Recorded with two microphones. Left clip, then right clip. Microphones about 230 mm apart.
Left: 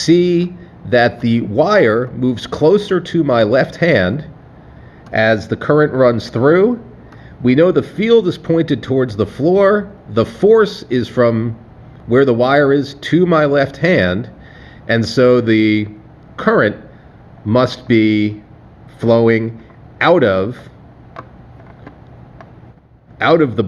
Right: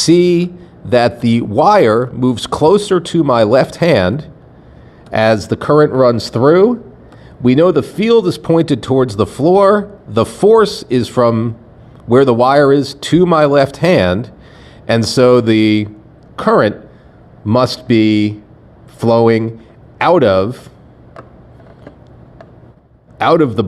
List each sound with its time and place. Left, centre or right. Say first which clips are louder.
0.0 s speech: right 2 dB; right
23.1 s a man's voice: right 1 dB; right